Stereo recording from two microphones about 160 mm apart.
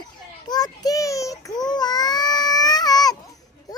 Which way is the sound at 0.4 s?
25° left (ahead or behind).